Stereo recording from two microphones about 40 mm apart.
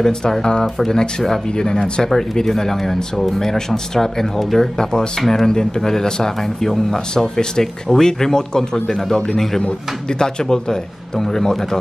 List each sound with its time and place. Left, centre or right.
0.0 s speech: centre
6.7 s speech: centre
7.3 s speech: centre